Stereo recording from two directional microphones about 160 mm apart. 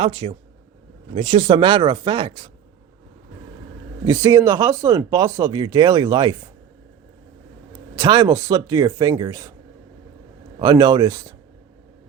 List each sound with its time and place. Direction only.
0.0 s speech: 35° right (ahead or behind)
4.0 s speech: 20° right (ahead or behind)
7.9 s speech: 25° right (ahead or behind)
10.6 s speech: 25° right (ahead or behind)